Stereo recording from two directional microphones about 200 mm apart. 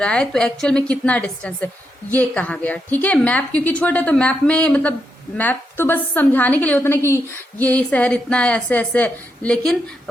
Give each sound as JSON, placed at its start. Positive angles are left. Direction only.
{"t": 0.0, "sound": "a woman's voice", "side_deg": 5}